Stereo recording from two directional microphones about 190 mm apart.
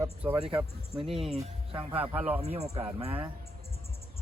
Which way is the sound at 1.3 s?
30° right (ahead or behind).